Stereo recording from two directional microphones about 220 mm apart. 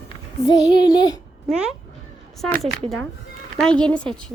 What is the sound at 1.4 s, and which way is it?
Speech, 5° right (ahead or behind).